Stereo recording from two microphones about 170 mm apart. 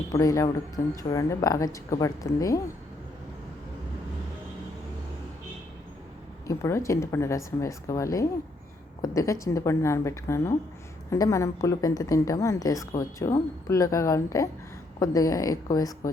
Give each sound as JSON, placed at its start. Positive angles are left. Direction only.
{"t": 0.1, "sound": "a woman's voice", "side_deg": 20}
{"t": 6.5, "sound": "a woman's voice", "side_deg": 15}